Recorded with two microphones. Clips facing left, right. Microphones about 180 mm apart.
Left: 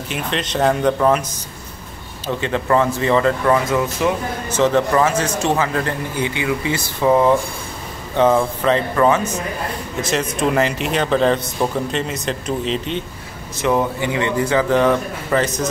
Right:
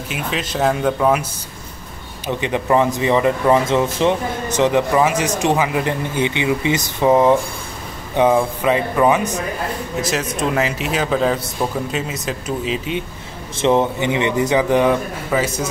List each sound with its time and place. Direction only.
0.1 s speech: 5° right (ahead or behind)
2.2 s speech: 15° right (ahead or behind)
4.5 s a man's voice: 15° right (ahead or behind)
10.0 s speech: centre (ahead or behind)
13.6 s a man's voice: 25° right (ahead or behind); by 15.6 s 10° right (ahead or behind)